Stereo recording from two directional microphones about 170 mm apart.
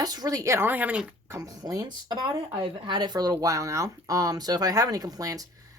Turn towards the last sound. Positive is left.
turn(degrees=-20)  # may be behind; listen again after turning